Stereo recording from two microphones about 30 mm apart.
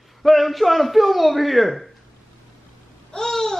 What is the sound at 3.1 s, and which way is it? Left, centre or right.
Babbling, centre.